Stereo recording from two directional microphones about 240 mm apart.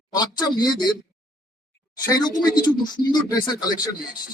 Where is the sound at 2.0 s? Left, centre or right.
Centre.